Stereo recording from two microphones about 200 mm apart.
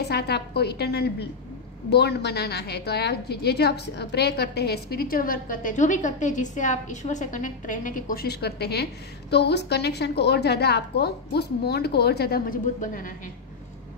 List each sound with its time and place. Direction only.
0.0 s a woman's voice: 55° left (ahead or behind)